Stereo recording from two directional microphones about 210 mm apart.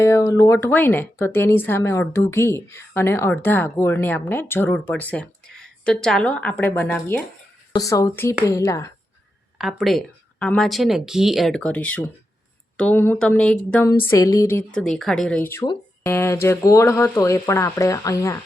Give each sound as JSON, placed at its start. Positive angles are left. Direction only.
{"t": 0.0, "sound": "speech", "side_deg": 15}
{"t": 9.6, "sound": "speech", "side_deg": 0}
{"t": 15.6, "sound": "music", "side_deg": 20}
{"t": 16.1, "sound": "speech", "side_deg": 10}